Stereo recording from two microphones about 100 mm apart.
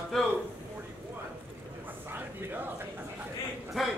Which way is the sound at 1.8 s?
20° right (ahead or behind).